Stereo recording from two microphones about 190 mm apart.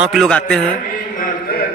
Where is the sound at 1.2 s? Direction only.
55° left (ahead or behind).